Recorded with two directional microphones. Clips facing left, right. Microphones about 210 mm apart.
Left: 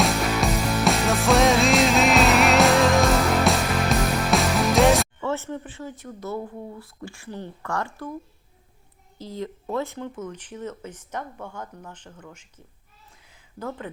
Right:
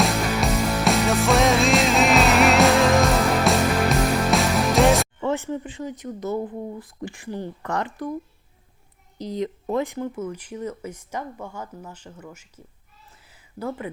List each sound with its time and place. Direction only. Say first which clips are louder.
0.0 s music: even; centre (ahead or behind)
5.2 s speech: right 3 dB; 15° right (ahead or behind)
9.1 s a child's voice: right 5 dB; 20° right (ahead or behind)
13.2 s a sound: right 3 dB; 5° right (ahead or behind)